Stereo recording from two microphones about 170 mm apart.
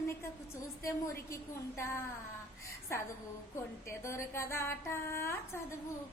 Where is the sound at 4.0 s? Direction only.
15° left (ahead or behind).